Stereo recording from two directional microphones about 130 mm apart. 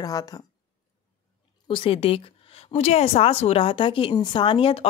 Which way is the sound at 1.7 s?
45° left (ahead or behind).